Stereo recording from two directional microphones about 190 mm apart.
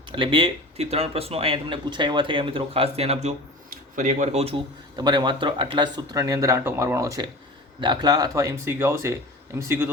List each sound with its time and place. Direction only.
0.2 s speech: 25° right (ahead or behind)
4.9 s speech: 20° right (ahead or behind)